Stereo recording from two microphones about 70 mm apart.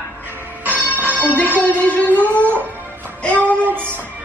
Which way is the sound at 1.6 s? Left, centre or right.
Left.